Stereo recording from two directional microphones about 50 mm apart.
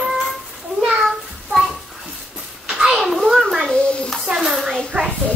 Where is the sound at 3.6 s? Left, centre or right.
Centre.